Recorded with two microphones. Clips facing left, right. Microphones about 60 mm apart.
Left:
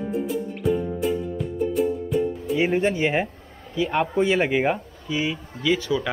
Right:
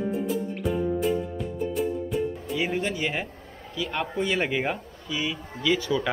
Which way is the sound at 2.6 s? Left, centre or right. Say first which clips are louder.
Left 6 dB; left.